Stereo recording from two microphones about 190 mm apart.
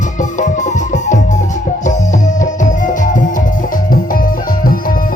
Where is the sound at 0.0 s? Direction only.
40° left (ahead or behind).